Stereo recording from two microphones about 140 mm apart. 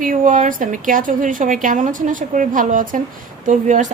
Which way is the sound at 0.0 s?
70° right (ahead or behind).